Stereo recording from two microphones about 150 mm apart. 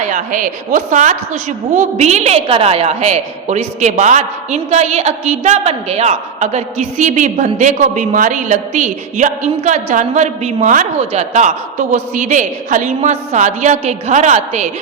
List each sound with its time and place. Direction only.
0.0 s a woman's voice: 60° right (ahead or behind)